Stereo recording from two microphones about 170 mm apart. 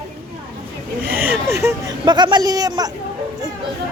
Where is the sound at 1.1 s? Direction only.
10° right (ahead or behind).